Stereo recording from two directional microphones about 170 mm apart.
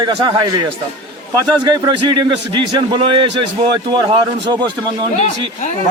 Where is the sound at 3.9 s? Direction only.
25° right (ahead or behind).